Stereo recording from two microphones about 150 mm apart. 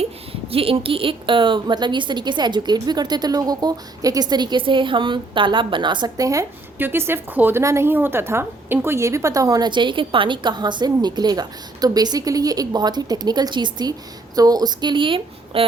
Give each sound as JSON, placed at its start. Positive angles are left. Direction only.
{"t": 0.0, "sound": "a woman's voice", "side_deg": -40}